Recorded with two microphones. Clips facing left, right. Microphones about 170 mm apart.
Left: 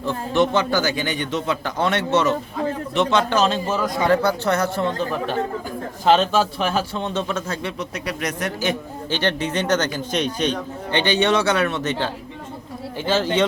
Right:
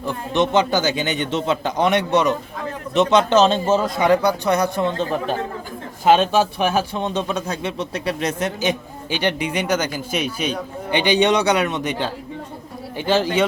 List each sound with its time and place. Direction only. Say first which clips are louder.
0.0 s speech: left 1 dB; 15° right (ahead or behind)
6.1 s a man's voice: right 2 dB; 15° right (ahead or behind)
7.8 s a man's voice: right 3 dB; 30° right (ahead or behind)